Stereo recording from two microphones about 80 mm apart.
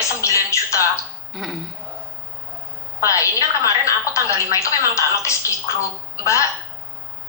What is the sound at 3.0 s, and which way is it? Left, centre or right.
Speech, left.